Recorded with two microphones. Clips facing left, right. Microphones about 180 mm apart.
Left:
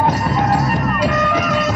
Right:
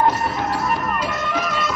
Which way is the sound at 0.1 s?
85° left.